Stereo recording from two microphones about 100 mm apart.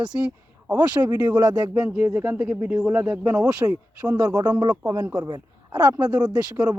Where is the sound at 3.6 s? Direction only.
35° right (ahead or behind).